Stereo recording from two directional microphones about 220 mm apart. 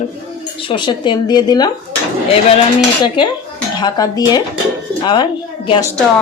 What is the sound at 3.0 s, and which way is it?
Speech, 20° left (ahead or behind).